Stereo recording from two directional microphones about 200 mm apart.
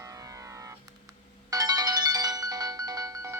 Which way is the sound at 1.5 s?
20° right (ahead or behind).